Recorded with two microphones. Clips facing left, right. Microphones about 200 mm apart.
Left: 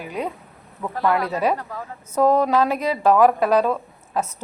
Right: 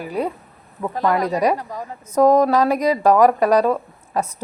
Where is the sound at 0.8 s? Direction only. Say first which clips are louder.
Right 2 dB; 20° right (ahead or behind).